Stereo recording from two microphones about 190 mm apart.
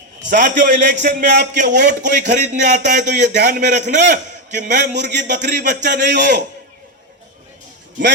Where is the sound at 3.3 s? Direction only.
60° right (ahead or behind).